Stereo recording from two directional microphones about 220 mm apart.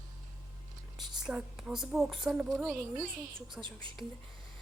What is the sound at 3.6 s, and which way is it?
Speech, 20° right (ahead or behind).